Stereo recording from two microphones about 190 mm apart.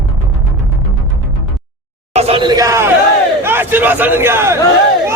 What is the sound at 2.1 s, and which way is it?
A man's voice, 30° right (ahead or behind).